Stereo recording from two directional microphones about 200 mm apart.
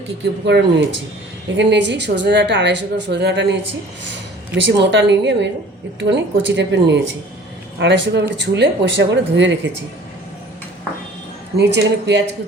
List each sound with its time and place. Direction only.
0.4 s a woman's voice: 60° right (ahead or behind)
11.5 s a woman's voice: 60° right (ahead or behind)